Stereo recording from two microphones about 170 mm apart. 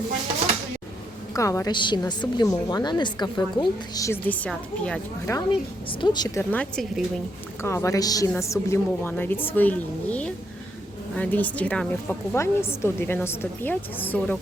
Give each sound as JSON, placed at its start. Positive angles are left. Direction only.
{"t": 1.3, "sound": "a woman's voice", "side_deg": 20}
{"t": 6.0, "sound": "a woman's voice", "side_deg": 25}
{"t": 6.5, "sound": "a woman's voice", "side_deg": 5}
{"t": 7.6, "sound": "a woman's voice", "side_deg": 15}